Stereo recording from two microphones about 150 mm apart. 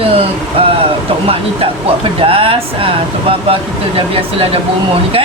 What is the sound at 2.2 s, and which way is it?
Speech, 35° right (ahead or behind).